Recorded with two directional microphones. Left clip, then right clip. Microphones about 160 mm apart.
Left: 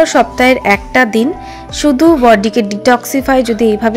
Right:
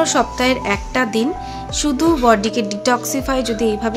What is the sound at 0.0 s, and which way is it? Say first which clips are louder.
A woman's voice: left 7 dB; 30° left (ahead or behind).